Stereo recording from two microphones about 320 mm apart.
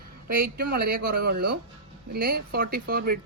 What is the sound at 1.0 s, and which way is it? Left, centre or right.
Speech, right.